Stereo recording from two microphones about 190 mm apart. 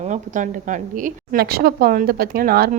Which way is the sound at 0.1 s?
40° right (ahead or behind).